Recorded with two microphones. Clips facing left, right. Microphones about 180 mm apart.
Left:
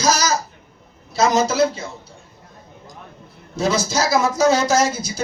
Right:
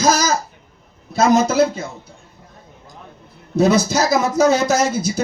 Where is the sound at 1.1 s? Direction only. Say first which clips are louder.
Right 3 dB; 55° right (ahead or behind).